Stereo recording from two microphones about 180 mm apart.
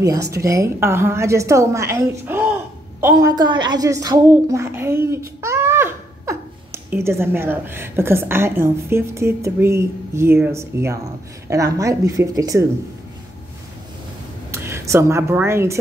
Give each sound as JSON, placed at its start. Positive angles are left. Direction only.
{"t": 0.0, "sound": "a woman's voice", "side_deg": -20}
{"t": 14.5, "sound": "speech", "side_deg": -15}